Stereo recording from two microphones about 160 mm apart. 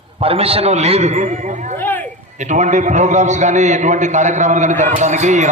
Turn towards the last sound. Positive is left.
turn(degrees=-50)  # may be behind; listen again after turning